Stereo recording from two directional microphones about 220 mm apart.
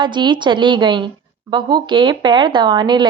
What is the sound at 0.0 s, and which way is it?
Speech, 20° right (ahead or behind).